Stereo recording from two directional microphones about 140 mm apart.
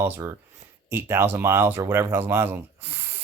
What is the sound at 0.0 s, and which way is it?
Speech, 25° right (ahead or behind).